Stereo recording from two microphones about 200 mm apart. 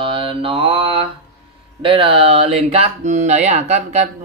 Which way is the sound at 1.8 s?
25° right (ahead or behind).